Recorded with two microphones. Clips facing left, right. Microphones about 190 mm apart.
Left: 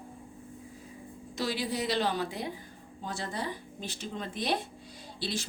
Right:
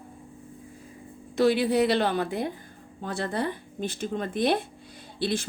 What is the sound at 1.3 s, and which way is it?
A woman's voice, 60° right (ahead or behind).